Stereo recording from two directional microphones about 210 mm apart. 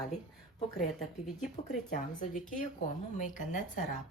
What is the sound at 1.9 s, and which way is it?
A woman's voice, 40° left (ahead or behind).